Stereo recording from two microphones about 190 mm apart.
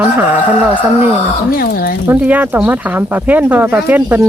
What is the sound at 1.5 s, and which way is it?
Speech, 55° left (ahead or behind).